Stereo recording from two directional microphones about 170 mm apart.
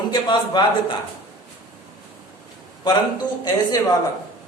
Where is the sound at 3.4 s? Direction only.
20° left (ahead or behind).